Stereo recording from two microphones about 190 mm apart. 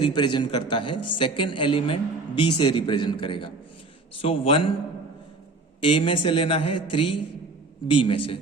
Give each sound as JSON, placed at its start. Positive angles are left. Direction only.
{"t": 0.0, "sound": "a man's voice", "side_deg": 25}
{"t": 5.8, "sound": "a man's voice", "side_deg": 25}